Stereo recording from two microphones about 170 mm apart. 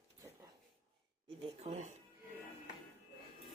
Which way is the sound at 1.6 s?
40° right (ahead or behind).